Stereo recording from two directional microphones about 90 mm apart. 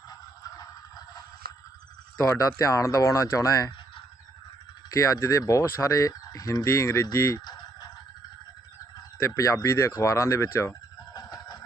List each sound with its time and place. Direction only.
0.1 s a sound: 45° left (ahead or behind)
2.3 s speech: 40° left (ahead or behind)
4.9 s speech: 40° left (ahead or behind)
7.3 s fowl: 55° left (ahead or behind)
9.3 s speech: 35° left (ahead or behind)
11.1 s chicken: 50° left (ahead or behind)